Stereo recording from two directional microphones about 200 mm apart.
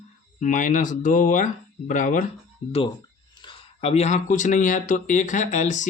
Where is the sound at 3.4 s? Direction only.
30° left (ahead or behind).